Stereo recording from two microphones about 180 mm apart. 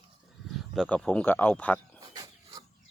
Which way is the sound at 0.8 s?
5° left (ahead or behind).